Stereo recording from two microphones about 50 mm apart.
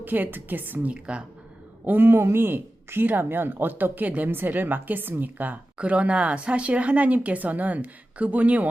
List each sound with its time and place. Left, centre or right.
0.0 s a woman's voice: right
1.8 s a woman's voice: right
5.7 s speech: right